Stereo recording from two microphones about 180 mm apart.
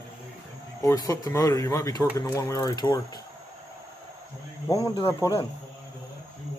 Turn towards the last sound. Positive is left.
turn(degrees=15)  # may be behind; listen again after turning